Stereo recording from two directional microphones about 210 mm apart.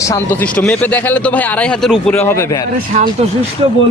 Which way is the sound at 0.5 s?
5° left (ahead or behind).